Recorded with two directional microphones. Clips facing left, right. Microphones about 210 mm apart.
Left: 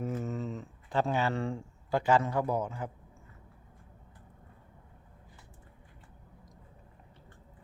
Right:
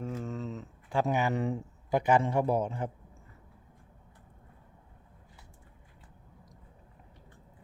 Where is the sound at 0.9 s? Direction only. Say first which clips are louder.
Right 1 dB; 15° right (ahead or behind).